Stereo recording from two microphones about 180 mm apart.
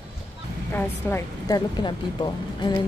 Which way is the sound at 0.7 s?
15° left (ahead or behind).